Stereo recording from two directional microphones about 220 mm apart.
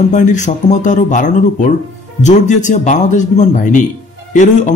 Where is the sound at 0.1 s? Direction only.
35° left (ahead or behind).